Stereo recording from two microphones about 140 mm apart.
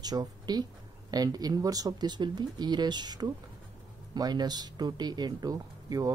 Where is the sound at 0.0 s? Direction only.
30° right (ahead or behind).